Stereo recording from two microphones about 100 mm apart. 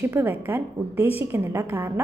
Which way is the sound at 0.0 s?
20° right (ahead or behind).